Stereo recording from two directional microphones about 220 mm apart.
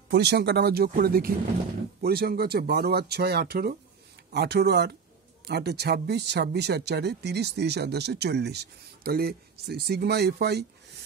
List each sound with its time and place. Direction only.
0.1 s speech: 50° right (ahead or behind)